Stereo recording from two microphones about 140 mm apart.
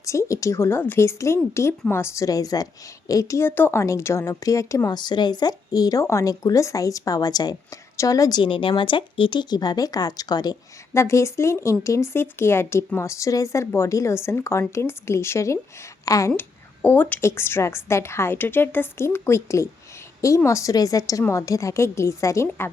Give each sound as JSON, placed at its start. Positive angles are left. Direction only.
{"t": 0.0, "sound": "a woman's voice", "side_deg": 20}